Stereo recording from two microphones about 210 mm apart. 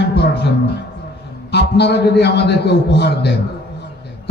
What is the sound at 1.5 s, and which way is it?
A man's voice, 50° left (ahead or behind).